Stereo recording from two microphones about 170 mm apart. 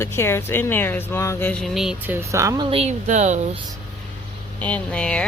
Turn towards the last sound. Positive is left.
turn(degrees=5)  # may be behind; listen again after turning